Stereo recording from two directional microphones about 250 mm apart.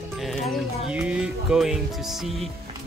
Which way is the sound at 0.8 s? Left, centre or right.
Centre.